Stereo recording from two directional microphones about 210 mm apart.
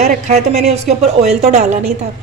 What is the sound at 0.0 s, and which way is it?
A woman's voice, 35° right (ahead or behind).